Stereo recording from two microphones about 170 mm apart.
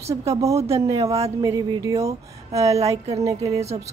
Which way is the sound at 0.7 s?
20° right (ahead or behind).